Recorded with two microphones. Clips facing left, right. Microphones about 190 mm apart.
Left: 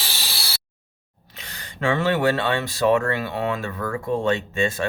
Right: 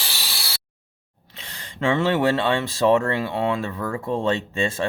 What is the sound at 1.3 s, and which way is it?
Speech, 30° right (ahead or behind).